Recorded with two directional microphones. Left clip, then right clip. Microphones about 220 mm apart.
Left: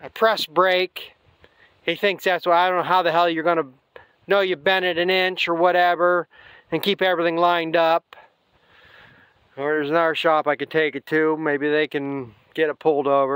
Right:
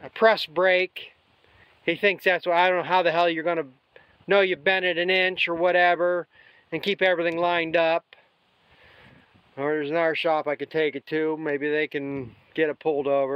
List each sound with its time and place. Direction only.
0.0 s speech: 30° left (ahead or behind)
9.6 s speech: 30° left (ahead or behind)